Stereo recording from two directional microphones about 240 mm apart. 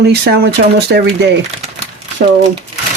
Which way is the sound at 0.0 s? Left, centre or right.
Right.